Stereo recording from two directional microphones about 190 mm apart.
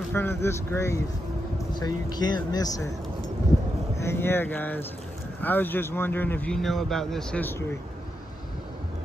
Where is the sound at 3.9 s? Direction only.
15° left (ahead or behind).